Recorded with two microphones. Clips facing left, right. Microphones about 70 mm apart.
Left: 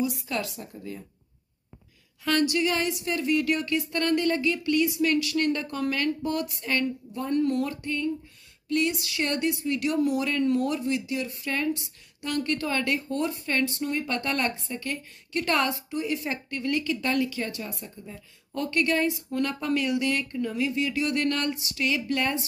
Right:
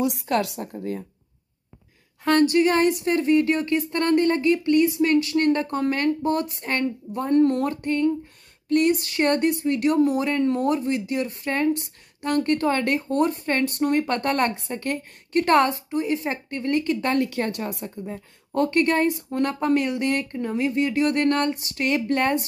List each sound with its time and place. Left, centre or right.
0.0 s a woman's voice: right
0.6 s speech: right
2.2 s a woman's voice: right
17.8 s speech: right